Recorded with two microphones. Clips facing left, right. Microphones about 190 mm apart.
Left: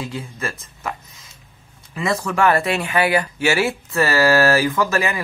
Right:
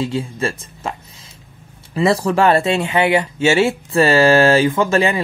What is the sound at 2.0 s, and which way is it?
Speech, 35° right (ahead or behind).